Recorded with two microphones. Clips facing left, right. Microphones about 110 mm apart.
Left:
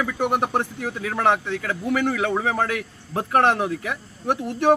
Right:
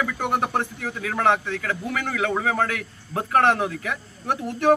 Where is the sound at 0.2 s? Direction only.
20° left (ahead or behind).